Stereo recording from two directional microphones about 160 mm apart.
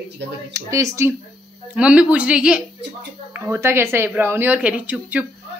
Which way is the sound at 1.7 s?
5° right (ahead or behind).